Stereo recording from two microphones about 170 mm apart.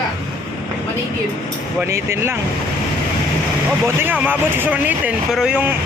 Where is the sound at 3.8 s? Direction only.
10° right (ahead or behind).